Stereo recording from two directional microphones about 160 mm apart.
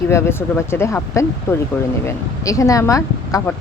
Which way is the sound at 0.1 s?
15° left (ahead or behind).